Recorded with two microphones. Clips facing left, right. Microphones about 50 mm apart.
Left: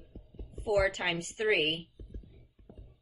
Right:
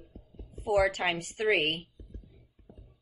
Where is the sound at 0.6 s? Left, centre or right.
Right.